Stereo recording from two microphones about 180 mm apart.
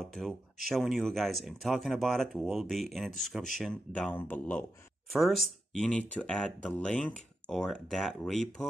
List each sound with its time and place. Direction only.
0.0 s speech: 5° left (ahead or behind)
5.1 s speech: centre (ahead or behind)